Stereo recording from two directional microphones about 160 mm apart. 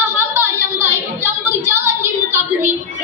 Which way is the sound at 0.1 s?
15° right (ahead or behind).